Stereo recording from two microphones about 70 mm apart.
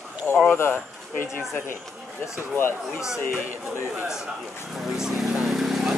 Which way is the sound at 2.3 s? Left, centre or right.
Left.